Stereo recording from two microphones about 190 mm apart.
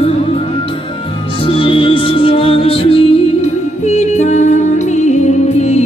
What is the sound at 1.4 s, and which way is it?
Music, 30° left (ahead or behind).